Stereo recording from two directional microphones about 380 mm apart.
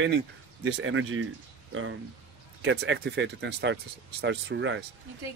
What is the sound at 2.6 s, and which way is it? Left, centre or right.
Speech, right.